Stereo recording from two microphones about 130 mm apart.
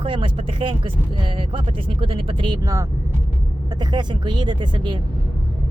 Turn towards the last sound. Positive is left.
turn(degrees=-40)  # may be behind; listen again after turning